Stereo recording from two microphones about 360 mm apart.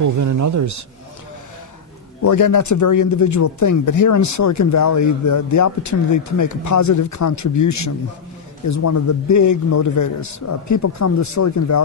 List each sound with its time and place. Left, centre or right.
0.0 s speech: right
2.2 s speech: left